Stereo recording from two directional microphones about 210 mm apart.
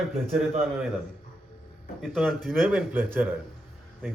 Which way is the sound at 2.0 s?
Centre (ahead or behind).